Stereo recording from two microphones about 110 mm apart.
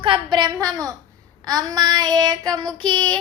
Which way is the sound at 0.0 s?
45° right (ahead or behind).